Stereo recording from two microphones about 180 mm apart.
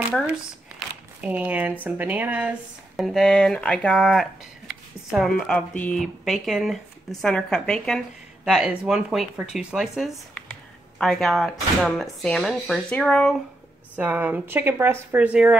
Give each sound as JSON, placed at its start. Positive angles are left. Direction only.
{"t": 0.7, "sound": "speech", "side_deg": -10}
{"t": 13.9, "sound": "speech", "side_deg": -10}